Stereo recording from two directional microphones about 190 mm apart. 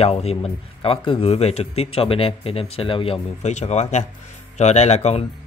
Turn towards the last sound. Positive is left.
turn(degrees=35)  # may be behind; listen again after turning